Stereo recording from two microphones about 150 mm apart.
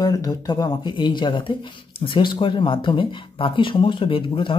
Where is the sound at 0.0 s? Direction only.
25° left (ahead or behind).